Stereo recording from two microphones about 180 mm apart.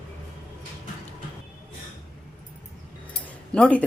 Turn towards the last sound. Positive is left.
turn(degrees=5)  # may be behind; listen again after turning